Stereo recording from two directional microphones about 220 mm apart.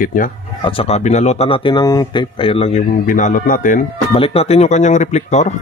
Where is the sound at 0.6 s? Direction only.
25° left (ahead or behind).